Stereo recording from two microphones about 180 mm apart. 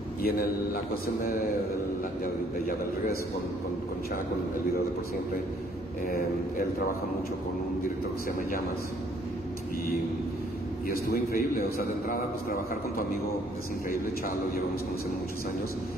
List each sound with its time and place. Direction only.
10.9 s a man's voice: 55° left (ahead or behind)